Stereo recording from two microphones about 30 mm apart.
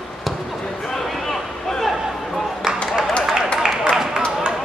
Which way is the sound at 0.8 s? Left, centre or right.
Centre.